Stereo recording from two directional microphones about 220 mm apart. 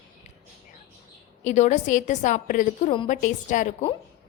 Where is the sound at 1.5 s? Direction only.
35° left (ahead or behind).